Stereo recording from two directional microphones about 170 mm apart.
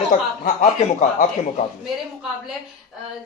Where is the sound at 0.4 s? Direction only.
50° left (ahead or behind).